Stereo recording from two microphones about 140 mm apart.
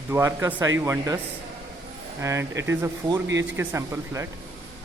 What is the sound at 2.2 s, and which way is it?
Speech, 20° right (ahead or behind).